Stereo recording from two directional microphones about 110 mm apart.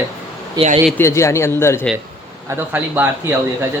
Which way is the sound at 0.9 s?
25° left (ahead or behind).